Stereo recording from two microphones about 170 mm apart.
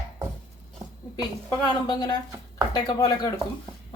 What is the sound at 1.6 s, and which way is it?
Speech, 25° left (ahead or behind).